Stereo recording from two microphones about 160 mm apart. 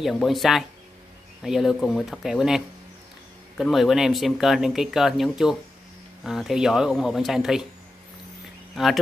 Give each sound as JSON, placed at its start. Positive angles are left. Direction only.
{"t": 0.0, "sound": "speech", "side_deg": 0}
{"t": 8.7, "sound": "speech", "side_deg": 0}